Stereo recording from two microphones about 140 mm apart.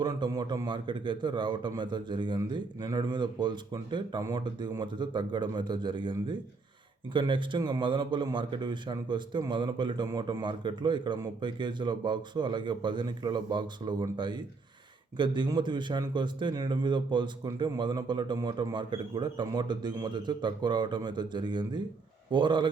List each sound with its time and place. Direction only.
0.0 s a man's voice: 30° right (ahead or behind)